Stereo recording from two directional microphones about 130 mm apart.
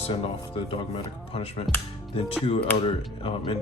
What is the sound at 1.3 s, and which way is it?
Speech, 50° left (ahead or behind).